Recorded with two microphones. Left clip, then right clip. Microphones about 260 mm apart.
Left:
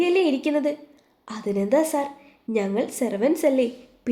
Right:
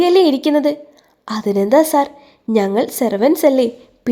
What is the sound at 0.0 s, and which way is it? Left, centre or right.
A woman's voice, right.